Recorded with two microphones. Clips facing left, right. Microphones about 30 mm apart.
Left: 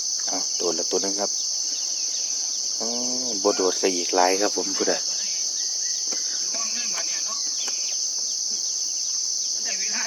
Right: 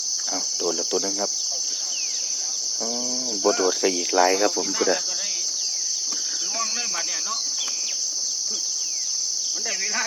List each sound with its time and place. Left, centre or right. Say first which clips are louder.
0.6 s speech: even; centre
3.4 s speech: right 1 dB; right
3.7 s speech: even; centre
4.4 s speech: right 2 dB; centre
4.9 s cricket: right 2 dB; centre